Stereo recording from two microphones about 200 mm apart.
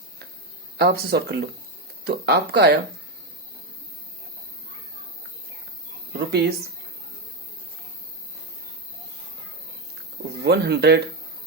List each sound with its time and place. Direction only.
0.8 s speech: 50° right (ahead or behind)
6.1 s speech: 55° right (ahead or behind)
10.4 s speech: 55° right (ahead or behind)